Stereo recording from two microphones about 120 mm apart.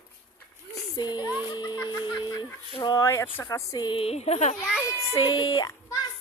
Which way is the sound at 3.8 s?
50° left (ahead or behind).